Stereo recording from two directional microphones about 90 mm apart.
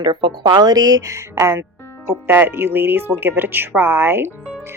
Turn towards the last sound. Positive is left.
turn(degrees=-25)  # may be behind; listen again after turning